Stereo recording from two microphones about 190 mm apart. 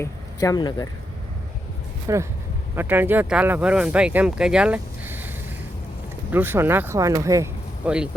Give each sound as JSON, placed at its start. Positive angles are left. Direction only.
{"t": 0.0, "sound": "speech", "side_deg": 20}
{"t": 2.1, "sound": "speech", "side_deg": -15}
{"t": 6.3, "sound": "speech", "side_deg": -10}
{"t": 7.9, "sound": "speech", "side_deg": -5}